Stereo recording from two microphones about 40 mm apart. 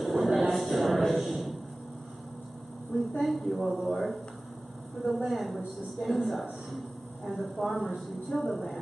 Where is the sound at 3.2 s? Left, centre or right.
Centre.